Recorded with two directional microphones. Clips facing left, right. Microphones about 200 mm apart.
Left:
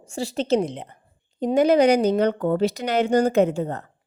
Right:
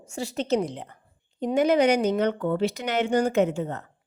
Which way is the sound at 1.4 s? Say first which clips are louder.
Left 4 dB; 35° left (ahead or behind).